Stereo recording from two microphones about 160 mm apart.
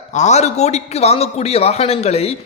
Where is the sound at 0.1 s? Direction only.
45° left (ahead or behind).